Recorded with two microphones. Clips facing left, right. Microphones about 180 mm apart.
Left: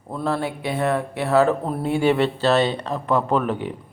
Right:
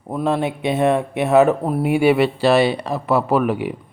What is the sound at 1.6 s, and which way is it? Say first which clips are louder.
Speech: right 4 dB; 10° right (ahead or behind).